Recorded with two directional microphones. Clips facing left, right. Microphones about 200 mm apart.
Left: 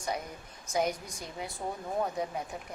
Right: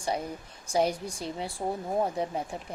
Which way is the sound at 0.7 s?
30° right (ahead or behind).